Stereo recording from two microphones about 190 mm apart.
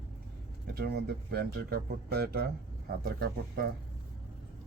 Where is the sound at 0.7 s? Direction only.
60° right (ahead or behind).